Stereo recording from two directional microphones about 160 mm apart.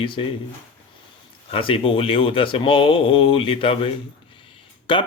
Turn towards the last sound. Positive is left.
turn(degrees=30)  # may be behind; listen again after turning